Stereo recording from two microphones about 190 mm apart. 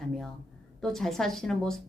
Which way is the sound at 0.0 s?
Centre (ahead or behind).